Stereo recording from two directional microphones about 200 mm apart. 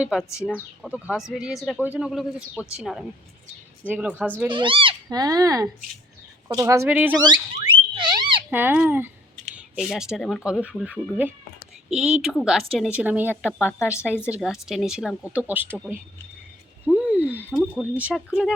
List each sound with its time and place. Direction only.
0.0 s a woman's voice: 5° right (ahead or behind)
4.4 s speech: 25° right (ahead or behind); by 7.2 s 10° right (ahead or behind)
7.2 s speech: 20° right (ahead or behind)
7.7 s a sound: 25° right (ahead or behind)
8.4 s a woman's voice: 10° right (ahead or behind)
13.6 s a woman's voice: 10° left (ahead or behind)
14.3 s a woman's voice: 5° right (ahead or behind)
16.8 s a sound: 5° right (ahead or behind)
17.5 s a woman's voice: 5° right (ahead or behind)